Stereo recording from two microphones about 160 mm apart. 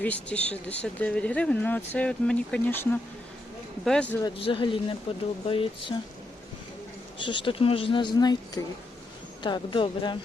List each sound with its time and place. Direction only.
0.0 s speech: 10° left (ahead or behind)
4.4 s speech: 35° left (ahead or behind)
7.2 s speech: 30° left (ahead or behind)